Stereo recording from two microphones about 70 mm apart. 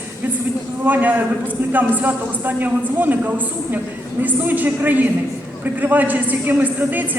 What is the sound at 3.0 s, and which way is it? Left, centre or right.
A woman's voice, right.